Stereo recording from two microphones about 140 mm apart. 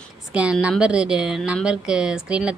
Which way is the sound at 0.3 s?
10° right (ahead or behind).